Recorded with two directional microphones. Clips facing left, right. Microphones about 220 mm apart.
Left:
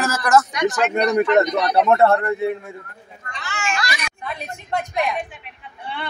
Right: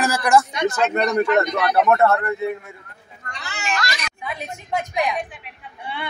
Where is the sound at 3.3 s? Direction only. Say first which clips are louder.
Left 1 dB; 35° right (ahead or behind).